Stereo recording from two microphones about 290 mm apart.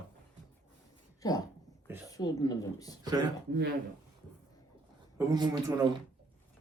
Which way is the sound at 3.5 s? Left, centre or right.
Right.